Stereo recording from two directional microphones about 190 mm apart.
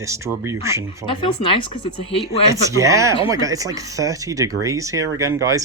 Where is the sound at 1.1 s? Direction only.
25° left (ahead or behind).